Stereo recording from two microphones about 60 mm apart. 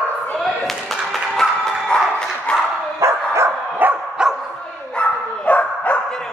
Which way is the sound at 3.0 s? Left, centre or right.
Right.